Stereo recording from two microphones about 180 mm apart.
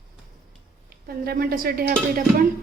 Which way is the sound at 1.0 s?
55° right (ahead or behind).